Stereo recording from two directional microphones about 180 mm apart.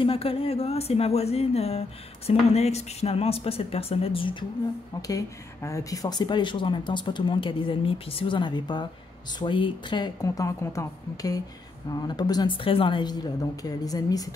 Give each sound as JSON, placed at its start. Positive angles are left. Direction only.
{"t": 0.0, "sound": "speech", "side_deg": 30}
{"t": 5.0, "sound": "speech", "side_deg": 15}